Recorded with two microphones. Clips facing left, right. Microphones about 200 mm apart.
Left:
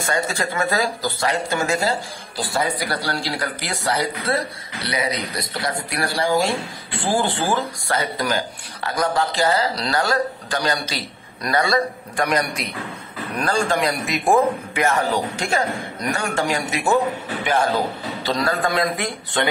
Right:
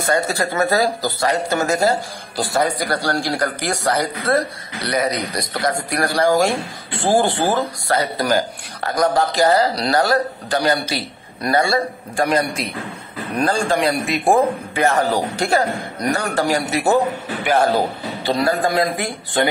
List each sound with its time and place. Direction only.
0.0 s speech: 35° right (ahead or behind)
7.2 s speech: 65° right (ahead or behind)
8.0 s a man's voice: 40° right (ahead or behind)